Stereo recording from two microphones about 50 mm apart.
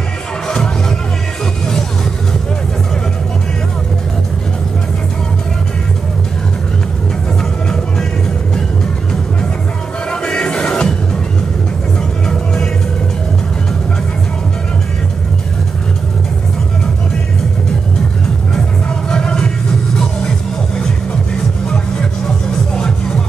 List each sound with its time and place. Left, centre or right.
0.5 s music: centre
10.2 s music: centre
19.0 s music: centre
22.8 s music: centre